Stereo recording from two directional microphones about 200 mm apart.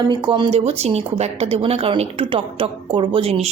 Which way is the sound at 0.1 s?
20° right (ahead or behind).